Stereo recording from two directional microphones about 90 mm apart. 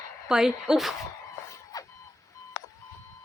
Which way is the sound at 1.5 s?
40° left (ahead or behind).